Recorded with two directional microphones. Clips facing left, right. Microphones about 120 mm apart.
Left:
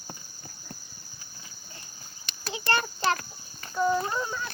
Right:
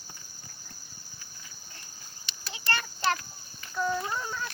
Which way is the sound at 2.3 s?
45° left (ahead or behind).